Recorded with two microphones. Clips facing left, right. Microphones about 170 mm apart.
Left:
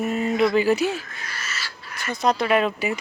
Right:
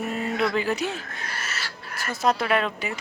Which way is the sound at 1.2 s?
55° right (ahead or behind).